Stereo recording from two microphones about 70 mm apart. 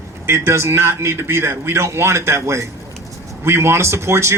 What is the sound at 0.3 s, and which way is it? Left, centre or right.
A man's voice, right.